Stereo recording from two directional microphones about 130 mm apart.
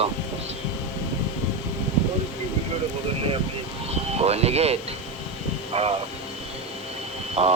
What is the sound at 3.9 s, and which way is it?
Speech, 55° right (ahead or behind).